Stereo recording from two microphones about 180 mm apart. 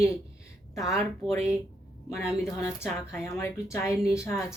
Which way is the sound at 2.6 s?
15° left (ahead or behind).